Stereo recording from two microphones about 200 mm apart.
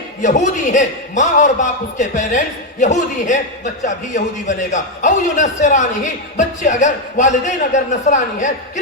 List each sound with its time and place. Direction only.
0.2 s a man's voice: 40° left (ahead or behind)